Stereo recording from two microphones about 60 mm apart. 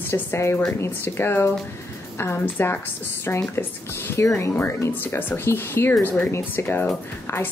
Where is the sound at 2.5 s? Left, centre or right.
Left.